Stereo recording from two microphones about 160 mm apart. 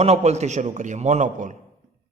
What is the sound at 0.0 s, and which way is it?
A man's voice, 45° right (ahead or behind).